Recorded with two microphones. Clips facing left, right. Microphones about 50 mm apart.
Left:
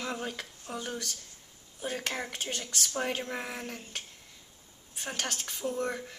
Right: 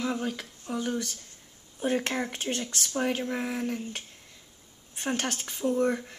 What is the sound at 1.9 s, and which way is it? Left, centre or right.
Speech, right.